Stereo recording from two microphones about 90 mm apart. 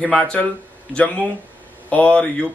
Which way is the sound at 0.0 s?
10° left (ahead or behind).